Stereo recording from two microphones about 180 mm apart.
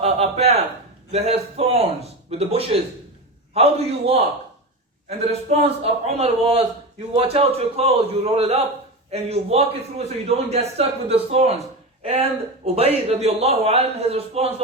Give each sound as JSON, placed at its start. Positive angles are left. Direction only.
{"t": 0.0, "sound": "a sound", "side_deg": -35}
{"t": 1.1, "sound": "a man's voice", "side_deg": -35}
{"t": 12.6, "sound": "a man's voice", "side_deg": -35}